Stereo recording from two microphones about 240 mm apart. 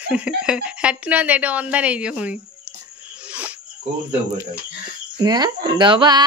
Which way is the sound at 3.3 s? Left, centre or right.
Centre.